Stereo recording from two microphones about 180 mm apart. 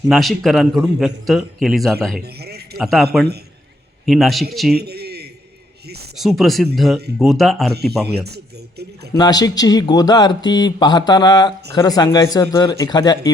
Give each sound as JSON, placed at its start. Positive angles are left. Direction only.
{"t": 0.1, "sound": "a man's voice", "side_deg": 0}
{"t": 4.7, "sound": "speech", "side_deg": -60}
{"t": 6.1, "sound": "a man's voice", "side_deg": 0}
{"t": 7.7, "sound": "speech", "side_deg": -60}
{"t": 9.1, "sound": "speech", "side_deg": 20}